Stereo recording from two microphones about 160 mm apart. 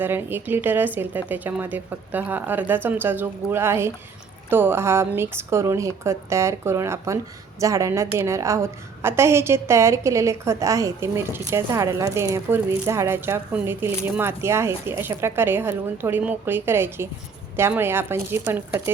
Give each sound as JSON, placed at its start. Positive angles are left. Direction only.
{"t": 0.0, "sound": "a woman's voice", "side_deg": -15}